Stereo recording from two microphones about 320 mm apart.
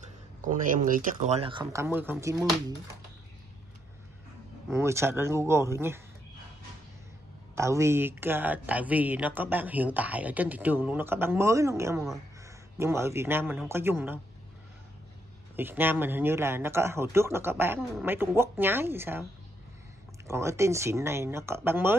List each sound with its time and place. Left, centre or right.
0.4 s a man's voice: right; by 2.4 s centre
4.6 s a man's voice: centre
7.5 s a man's voice: centre
15.5 s a man's voice: centre
20.2 s a man's voice: centre